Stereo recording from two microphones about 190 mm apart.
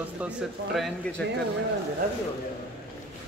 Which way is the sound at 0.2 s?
Centre (ahead or behind).